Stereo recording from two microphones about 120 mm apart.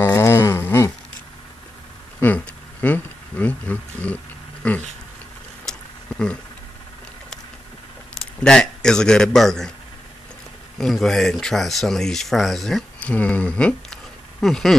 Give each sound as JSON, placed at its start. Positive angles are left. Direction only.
{"t": 0.0, "sound": "a sound", "side_deg": 20}
{"t": 2.1, "sound": "a sound", "side_deg": 15}
{"t": 5.7, "sound": "vehicle", "side_deg": 5}
{"t": 8.5, "sound": "a man's voice", "side_deg": 5}
{"t": 10.8, "sound": "speech", "side_deg": 5}
{"t": 13.0, "sound": "speech", "side_deg": 10}